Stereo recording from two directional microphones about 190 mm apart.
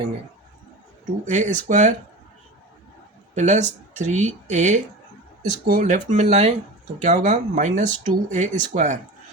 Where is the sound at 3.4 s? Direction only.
40° right (ahead or behind).